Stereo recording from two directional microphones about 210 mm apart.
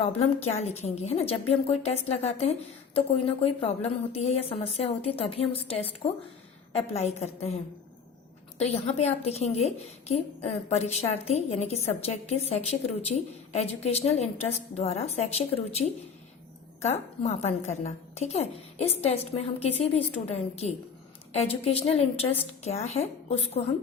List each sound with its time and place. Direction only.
0.0 s a woman's voice: 30° left (ahead or behind)